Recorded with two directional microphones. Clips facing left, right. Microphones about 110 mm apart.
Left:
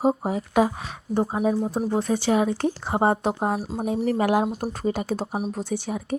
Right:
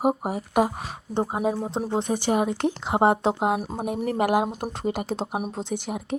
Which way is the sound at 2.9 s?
75° right (ahead or behind).